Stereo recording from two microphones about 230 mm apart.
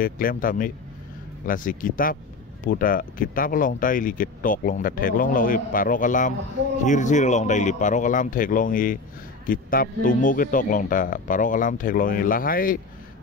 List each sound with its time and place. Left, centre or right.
0.0 s speech: left